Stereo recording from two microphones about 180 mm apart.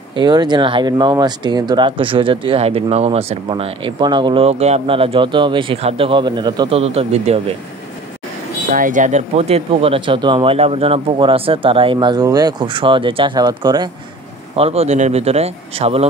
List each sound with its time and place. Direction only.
0.1 s speech: 25° right (ahead or behind)
6.7 s speech: 35° right (ahead or behind)
8.7 s speech: 45° right (ahead or behind); by 13.8 s 20° right (ahead or behind)
14.5 s speech: 35° right (ahead or behind)